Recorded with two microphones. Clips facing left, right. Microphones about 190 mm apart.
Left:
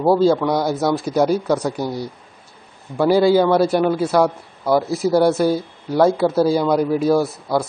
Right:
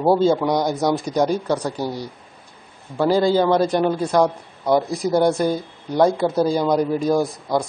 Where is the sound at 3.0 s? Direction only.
10° left (ahead or behind).